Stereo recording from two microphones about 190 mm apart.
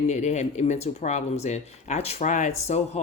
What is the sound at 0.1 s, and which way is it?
Speech, 35° left (ahead or behind).